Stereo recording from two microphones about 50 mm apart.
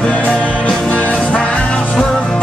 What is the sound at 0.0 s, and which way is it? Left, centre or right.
Music, left.